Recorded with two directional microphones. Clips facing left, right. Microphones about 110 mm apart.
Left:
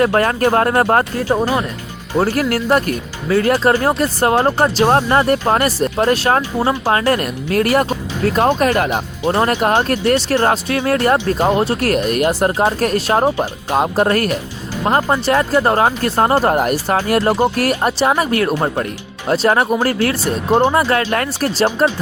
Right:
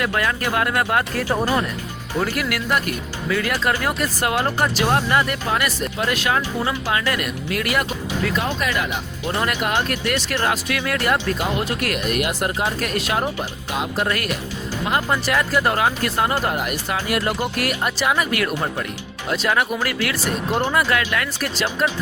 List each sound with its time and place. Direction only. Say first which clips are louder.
0.0 s speech: left 8 dB; 45° left (ahead or behind)
1.3 s speech: left 4 dB; 15° left (ahead or behind)
2.1 s speech: left 7 dB; 40° left (ahead or behind)